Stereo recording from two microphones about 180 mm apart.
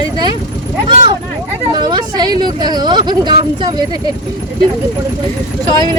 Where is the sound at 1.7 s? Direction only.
25° right (ahead or behind).